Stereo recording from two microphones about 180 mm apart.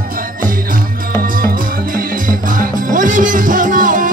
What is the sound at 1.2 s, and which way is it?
Music, 50° right (ahead or behind).